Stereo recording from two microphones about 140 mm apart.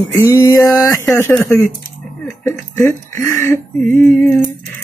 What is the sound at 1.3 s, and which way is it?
Mantra, 5° left (ahead or behind).